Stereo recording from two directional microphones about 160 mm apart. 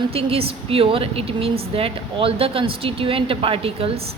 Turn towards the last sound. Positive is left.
turn(degrees=-35)  # may be behind; listen again after turning